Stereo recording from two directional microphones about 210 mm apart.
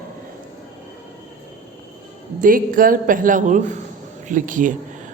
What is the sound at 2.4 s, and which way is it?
A woman's voice, 40° right (ahead or behind).